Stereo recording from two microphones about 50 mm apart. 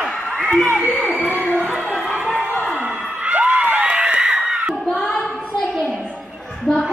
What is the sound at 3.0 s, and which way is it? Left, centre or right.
Music, right.